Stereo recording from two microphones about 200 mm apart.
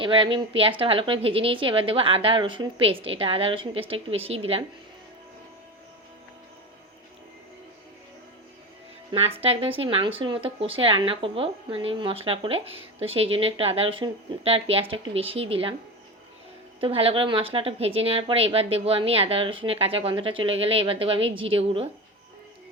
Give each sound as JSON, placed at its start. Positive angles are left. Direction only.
{"t": 0.0, "sound": "speech", "side_deg": -25}
{"t": 9.1, "sound": "speech", "side_deg": -30}
{"t": 16.8, "sound": "speech", "side_deg": -30}